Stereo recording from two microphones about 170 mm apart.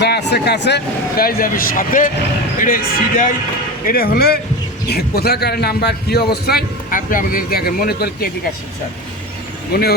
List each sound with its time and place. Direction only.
0.0 s a man's voice: 85° left; by 8.3 s 65° left (ahead or behind)